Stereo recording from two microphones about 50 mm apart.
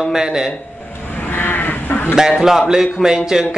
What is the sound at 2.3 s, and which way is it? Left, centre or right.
Speech, centre.